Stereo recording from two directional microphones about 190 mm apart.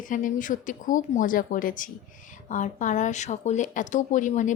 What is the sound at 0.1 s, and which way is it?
Speech, 45° left (ahead or behind).